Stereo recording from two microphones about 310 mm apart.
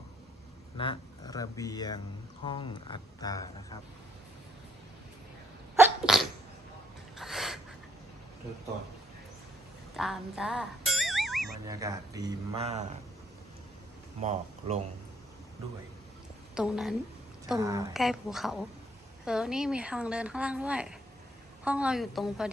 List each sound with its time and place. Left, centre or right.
0.8 s speech: centre
5.7 s sneeze: centre
7.2 s a sound: centre
9.9 s music: centre
11.6 s speech: centre
14.2 s speech: right
16.6 s speech: centre